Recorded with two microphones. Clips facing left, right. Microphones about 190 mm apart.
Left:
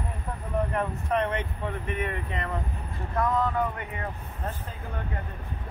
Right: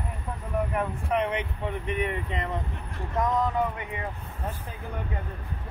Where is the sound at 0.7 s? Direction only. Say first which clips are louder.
Even; 10° right (ahead or behind).